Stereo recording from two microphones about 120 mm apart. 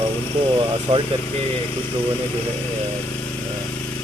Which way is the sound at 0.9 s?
60° right (ahead or behind).